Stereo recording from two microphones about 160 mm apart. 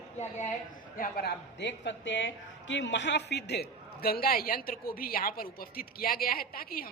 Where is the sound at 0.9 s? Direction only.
75° left (ahead or behind).